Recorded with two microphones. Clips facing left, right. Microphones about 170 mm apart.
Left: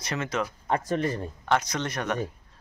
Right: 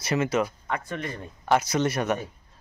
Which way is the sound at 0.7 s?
35° left (ahead or behind).